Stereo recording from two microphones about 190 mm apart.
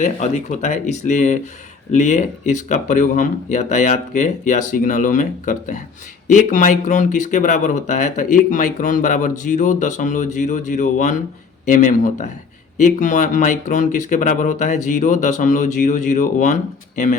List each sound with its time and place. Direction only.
0.0 s speech: 40° left (ahead or behind)